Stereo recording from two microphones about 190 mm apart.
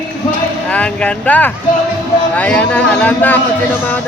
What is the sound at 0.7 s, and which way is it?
Speech, 5° left (ahead or behind).